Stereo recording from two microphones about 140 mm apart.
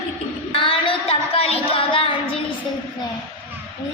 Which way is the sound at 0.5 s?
40° left (ahead or behind).